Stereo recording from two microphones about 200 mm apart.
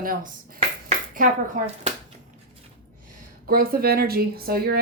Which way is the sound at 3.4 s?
45° right (ahead or behind).